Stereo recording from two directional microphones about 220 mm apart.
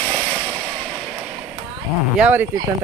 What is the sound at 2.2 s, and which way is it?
Speech, 5° right (ahead or behind).